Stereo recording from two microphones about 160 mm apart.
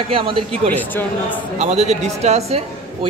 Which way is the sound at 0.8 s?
10° left (ahead or behind).